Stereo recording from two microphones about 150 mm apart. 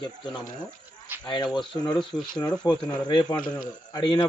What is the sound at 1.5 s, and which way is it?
Speech, 30° left (ahead or behind).